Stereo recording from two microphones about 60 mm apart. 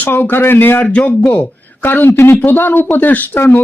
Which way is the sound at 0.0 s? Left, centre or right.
Left.